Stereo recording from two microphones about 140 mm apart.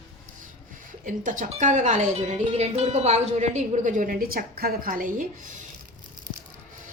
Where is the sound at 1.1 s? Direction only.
65° right (ahead or behind).